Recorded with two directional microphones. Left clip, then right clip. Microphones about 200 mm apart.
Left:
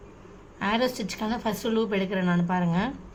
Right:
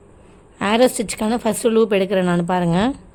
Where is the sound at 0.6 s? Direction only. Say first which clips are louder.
Right 10 dB; 60° right (ahead or behind).